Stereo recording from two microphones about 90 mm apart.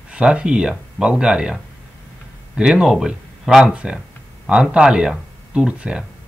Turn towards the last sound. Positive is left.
turn(degrees=-10)  # may be behind; listen again after turning